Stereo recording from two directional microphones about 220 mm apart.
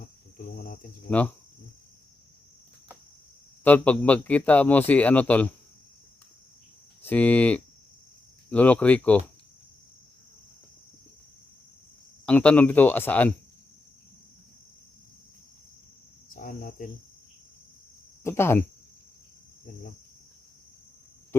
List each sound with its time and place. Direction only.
0.4 s cricket: 40° left (ahead or behind)
1.1 s a man's voice: 10° left (ahead or behind)
3.6 s a man's voice: 5° left (ahead or behind)
7.0 s a man's voice: 5° left (ahead or behind)
12.2 s a man's voice: 5° left (ahead or behind)
16.3 s speech: 40° left (ahead or behind)
18.2 s speech: 10° left (ahead or behind)